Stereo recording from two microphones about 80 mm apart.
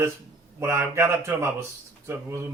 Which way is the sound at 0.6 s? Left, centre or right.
Right.